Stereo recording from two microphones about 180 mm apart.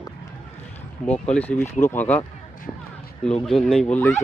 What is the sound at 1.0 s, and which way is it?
Speech, 5° left (ahead or behind).